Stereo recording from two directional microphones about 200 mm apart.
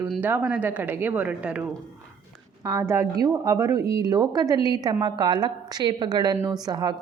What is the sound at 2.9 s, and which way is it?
A woman's voice, 15° right (ahead or behind).